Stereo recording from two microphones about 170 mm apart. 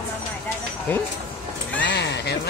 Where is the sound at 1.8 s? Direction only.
85° left.